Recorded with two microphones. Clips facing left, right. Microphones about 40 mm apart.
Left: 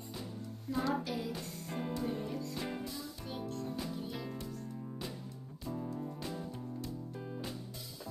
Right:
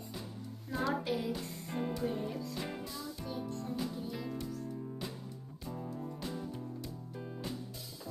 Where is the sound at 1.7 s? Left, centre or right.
Centre.